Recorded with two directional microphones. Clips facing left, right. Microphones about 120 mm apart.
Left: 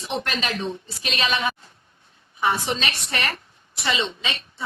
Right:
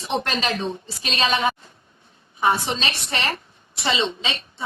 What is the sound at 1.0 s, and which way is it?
A woman's voice, 35° right (ahead or behind).